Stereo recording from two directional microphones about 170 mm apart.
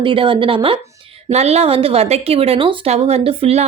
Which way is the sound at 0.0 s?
30° right (ahead or behind).